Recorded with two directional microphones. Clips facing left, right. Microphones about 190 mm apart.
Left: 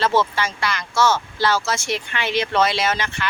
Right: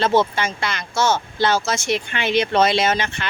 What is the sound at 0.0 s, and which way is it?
Speech, 20° right (ahead or behind).